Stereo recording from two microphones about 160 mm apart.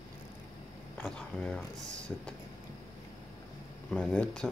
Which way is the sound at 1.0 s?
5° left (ahead or behind).